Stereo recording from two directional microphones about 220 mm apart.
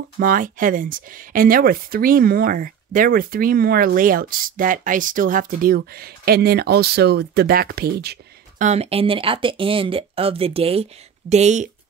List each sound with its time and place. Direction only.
0.2 s speech: 40° right (ahead or behind)
8.6 s speech: 30° right (ahead or behind)